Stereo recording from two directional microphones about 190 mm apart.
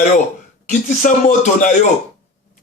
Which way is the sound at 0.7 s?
40° left (ahead or behind).